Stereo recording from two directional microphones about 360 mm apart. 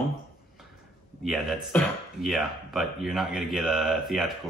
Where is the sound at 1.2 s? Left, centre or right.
Centre.